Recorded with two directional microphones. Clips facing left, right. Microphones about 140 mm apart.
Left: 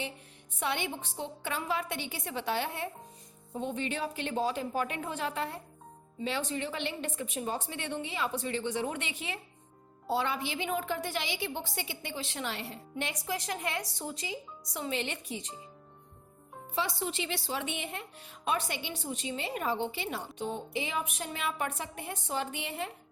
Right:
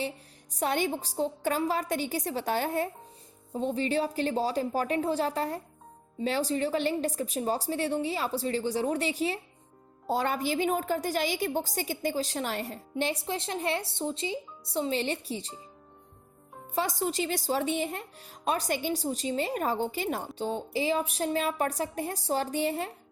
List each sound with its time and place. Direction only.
0.5 s a woman's voice: 40° right (ahead or behind)
16.7 s a woman's voice: 45° right (ahead or behind)
20.4 s a woman's voice: 30° right (ahead or behind)